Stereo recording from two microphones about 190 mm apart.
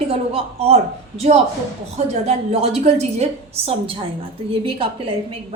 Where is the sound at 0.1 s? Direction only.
30° right (ahead or behind).